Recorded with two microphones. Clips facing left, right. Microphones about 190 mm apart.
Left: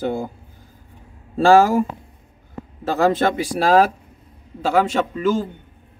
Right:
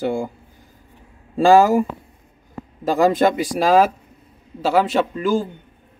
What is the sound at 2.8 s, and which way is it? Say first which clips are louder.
A man's voice: right 2 dB; 10° right (ahead or behind).